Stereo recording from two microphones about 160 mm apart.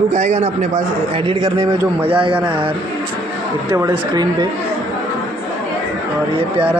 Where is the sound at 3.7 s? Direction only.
20° right (ahead or behind).